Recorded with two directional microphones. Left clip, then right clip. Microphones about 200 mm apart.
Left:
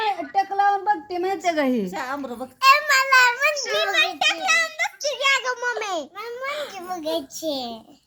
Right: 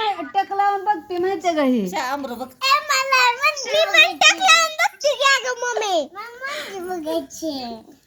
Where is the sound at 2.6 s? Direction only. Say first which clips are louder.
Left 2 dB; 5° left (ahead or behind).